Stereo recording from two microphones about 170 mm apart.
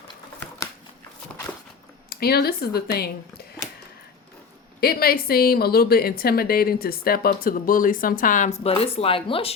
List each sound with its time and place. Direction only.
2.0 s speech: 65° left (ahead or behind)
4.8 s speech: 60° left (ahead or behind); by 9.6 s 35° left (ahead or behind)